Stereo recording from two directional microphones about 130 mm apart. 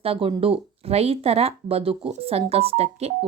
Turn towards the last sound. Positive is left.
turn(degrees=-50)  # may be behind; listen again after turning